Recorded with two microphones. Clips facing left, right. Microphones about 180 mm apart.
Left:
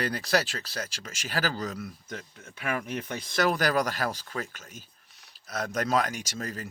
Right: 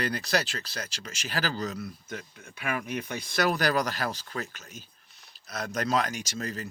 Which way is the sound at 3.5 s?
45° left (ahead or behind).